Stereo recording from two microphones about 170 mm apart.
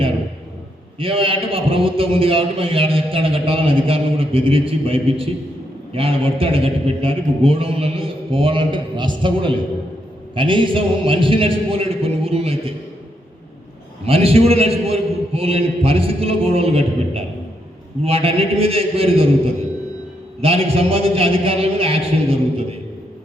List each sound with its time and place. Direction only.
0.9 s a man's voice: 35° right (ahead or behind)
14.0 s a man's voice: 35° right (ahead or behind)
20.4 s a man's voice: 35° right (ahead or behind)